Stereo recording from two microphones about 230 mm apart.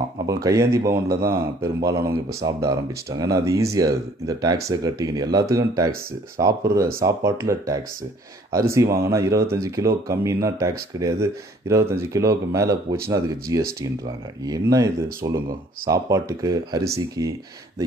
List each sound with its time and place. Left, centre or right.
0.3 s speech: centre